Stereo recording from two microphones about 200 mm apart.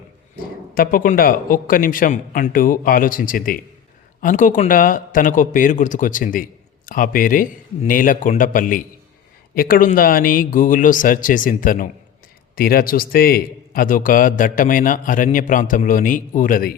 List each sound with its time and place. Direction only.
0.7 s a man's voice: 45° left (ahead or behind)